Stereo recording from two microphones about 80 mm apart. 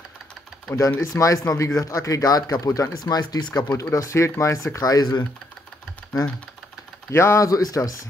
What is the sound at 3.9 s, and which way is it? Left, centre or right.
Speech, left.